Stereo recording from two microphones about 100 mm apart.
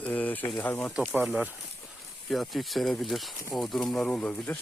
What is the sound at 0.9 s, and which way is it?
Speech, 10° right (ahead or behind).